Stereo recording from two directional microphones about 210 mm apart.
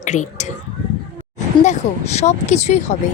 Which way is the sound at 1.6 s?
35° left (ahead or behind).